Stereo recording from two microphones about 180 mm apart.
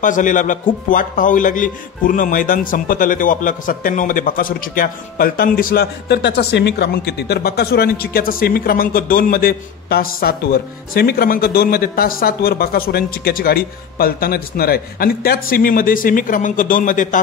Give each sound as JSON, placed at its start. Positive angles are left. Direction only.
{"t": 0.0, "sound": "a man's voice", "side_deg": 45}